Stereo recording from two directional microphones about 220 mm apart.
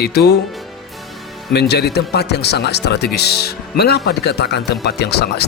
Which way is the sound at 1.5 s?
50° left (ahead or behind).